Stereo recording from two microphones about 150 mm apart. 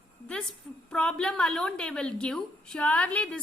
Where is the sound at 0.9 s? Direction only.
5° left (ahead or behind).